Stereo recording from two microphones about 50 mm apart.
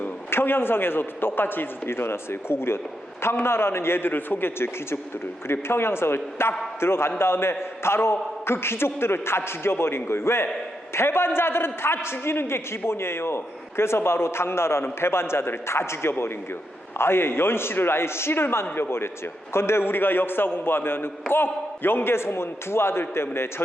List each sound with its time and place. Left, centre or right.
0.3 s a man's voice: left